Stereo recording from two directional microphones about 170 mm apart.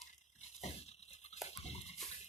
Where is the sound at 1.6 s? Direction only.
40° left (ahead or behind).